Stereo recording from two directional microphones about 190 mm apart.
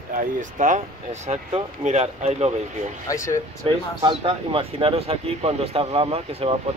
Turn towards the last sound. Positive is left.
turn(degrees=-30)  # may be behind; listen again after turning